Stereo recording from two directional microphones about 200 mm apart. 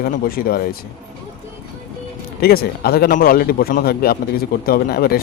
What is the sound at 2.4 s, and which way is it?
A man's voice, 50° left (ahead or behind).